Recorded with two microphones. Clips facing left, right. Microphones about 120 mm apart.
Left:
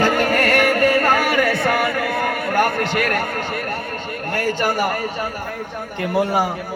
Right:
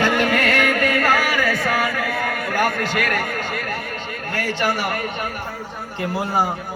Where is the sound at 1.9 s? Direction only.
50° left (ahead or behind).